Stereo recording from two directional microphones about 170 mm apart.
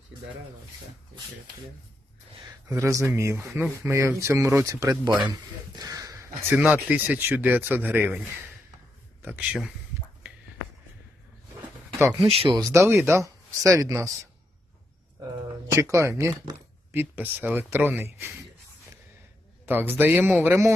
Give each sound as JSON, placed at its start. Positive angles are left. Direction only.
{"t": 2.4, "sound": "speech", "side_deg": -20}
{"t": 9.2, "sound": "speech", "side_deg": -10}
{"t": 11.9, "sound": "speech", "side_deg": -20}
{"t": 12.3, "sound": "speech", "side_deg": -35}
{"t": 12.5, "sound": "speech", "side_deg": -20}
{"t": 15.2, "sound": "speech", "side_deg": -20}
{"t": 19.6, "sound": "speech", "side_deg": -10}